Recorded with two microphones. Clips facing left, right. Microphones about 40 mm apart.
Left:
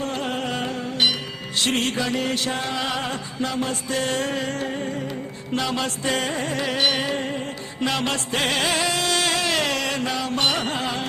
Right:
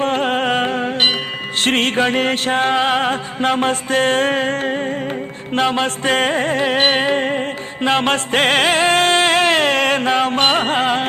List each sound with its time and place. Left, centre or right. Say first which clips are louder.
0.0 s music: right 9 dB; right